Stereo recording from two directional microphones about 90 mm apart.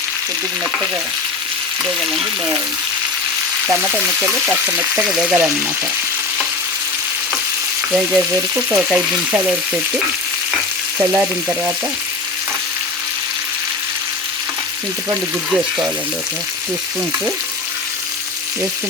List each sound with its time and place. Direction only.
3.7 s frying: 25° right (ahead or behind)
8.1 s frying: 15° right (ahead or behind)
10.9 s frying: 20° right (ahead or behind)